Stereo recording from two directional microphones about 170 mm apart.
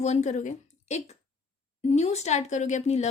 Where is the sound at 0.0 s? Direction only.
40° left (ahead or behind).